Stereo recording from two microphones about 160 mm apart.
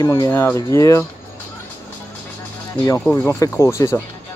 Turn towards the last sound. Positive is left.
turn(degrees=15)  # may be behind; listen again after turning